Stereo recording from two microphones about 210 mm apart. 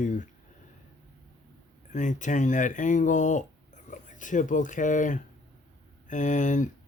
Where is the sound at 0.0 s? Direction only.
35° left (ahead or behind).